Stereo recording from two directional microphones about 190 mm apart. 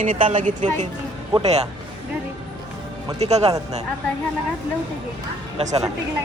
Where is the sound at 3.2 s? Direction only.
35° right (ahead or behind).